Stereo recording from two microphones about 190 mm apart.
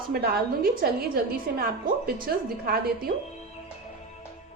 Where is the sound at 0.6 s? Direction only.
50° right (ahead or behind).